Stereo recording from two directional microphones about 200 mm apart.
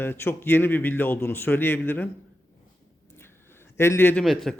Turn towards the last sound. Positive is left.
turn(degrees=5)  # may be behind; listen again after turning